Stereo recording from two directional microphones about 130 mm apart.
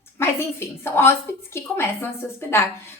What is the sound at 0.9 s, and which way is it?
A woman's voice, 20° left (ahead or behind).